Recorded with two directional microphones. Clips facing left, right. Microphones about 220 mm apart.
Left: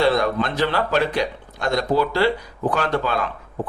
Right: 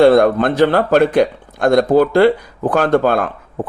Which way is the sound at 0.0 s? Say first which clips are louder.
Right 9 dB; 50° right (ahead or behind).